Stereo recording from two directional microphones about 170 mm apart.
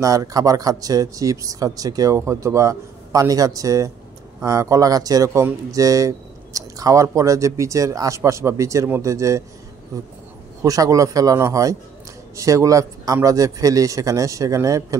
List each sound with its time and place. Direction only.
0.0 s speech: 20° right (ahead or behind)
10.6 s speech: 20° right (ahead or behind)